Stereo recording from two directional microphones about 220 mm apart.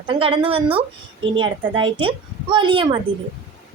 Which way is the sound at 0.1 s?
25° right (ahead or behind).